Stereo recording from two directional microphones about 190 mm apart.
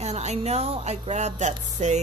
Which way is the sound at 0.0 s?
35° right (ahead or behind).